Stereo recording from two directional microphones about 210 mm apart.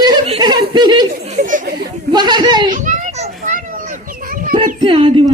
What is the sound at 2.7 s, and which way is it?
Speech, 40° right (ahead or behind).